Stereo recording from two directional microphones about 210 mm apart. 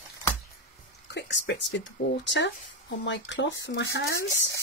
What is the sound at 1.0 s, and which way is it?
Speech, 55° left (ahead or behind).